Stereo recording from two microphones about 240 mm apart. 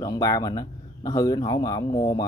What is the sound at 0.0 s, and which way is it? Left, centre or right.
Speech, centre.